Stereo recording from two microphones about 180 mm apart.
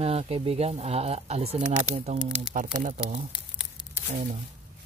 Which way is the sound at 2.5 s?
50° right (ahead or behind).